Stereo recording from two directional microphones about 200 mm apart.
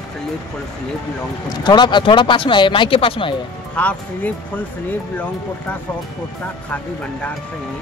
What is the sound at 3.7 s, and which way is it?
Speech, 5° left (ahead or behind).